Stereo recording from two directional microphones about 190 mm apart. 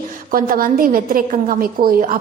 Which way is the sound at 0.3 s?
50° right (ahead or behind).